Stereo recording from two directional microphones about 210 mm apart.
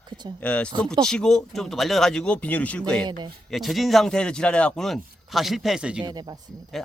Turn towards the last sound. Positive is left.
turn(degrees=-20)  # may be behind; listen again after turning